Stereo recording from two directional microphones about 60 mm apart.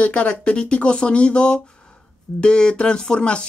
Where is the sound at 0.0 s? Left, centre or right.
Centre.